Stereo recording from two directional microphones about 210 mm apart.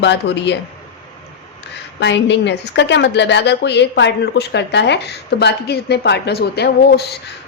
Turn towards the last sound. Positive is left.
turn(degrees=50)  # may be behind; listen again after turning